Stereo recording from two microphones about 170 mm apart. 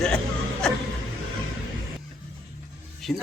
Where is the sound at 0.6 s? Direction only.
5° left (ahead or behind).